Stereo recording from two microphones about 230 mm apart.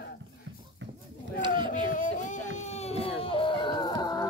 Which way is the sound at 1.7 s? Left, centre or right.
Left.